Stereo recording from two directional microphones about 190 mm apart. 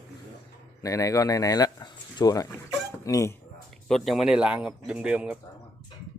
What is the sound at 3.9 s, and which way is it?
Speech, centre (ahead or behind).